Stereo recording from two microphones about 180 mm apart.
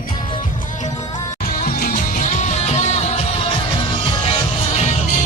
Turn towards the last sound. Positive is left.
turn(degrees=35)  # may be behind; listen again after turning